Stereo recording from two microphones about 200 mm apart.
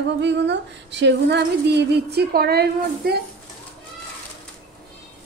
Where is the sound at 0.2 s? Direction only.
60° right (ahead or behind).